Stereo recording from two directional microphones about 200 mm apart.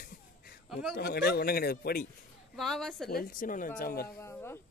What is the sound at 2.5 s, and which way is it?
Speech, centre (ahead or behind).